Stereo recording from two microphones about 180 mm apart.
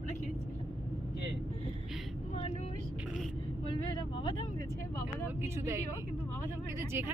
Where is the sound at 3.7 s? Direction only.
25° left (ahead or behind).